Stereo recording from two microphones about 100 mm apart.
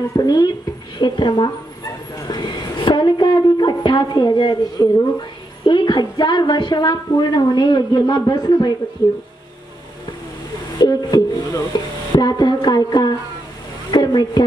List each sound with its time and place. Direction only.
0.1 s a woman's voice: 40° left (ahead or behind)
10.8 s music: 45° left (ahead or behind)
13.8 s a woman's voice: 45° left (ahead or behind)